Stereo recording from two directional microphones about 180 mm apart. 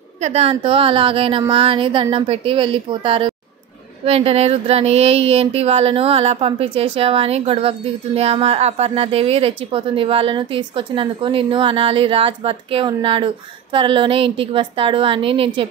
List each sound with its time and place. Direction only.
0.2 s a woman's voice: 35° right (ahead or behind)